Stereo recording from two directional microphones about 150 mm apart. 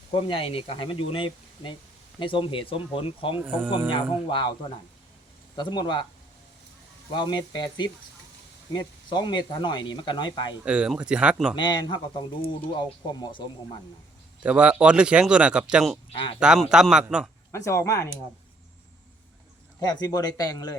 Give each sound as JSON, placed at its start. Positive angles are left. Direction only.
{"t": 0.1, "sound": "speech", "side_deg": 35}
{"t": 3.4, "sound": "speech", "side_deg": -15}
{"t": 3.9, "sound": "speech", "side_deg": 30}
{"t": 5.5, "sound": "speech", "side_deg": 30}
{"t": 7.1, "sound": "speech", "side_deg": 30}
{"t": 10.6, "sound": "speech", "side_deg": -10}
{"t": 11.5, "sound": "speech", "side_deg": 30}
{"t": 14.4, "sound": "a man's voice", "side_deg": -10}
{"t": 17.5, "sound": "speech", "side_deg": 20}
{"t": 19.8, "sound": "speech", "side_deg": 25}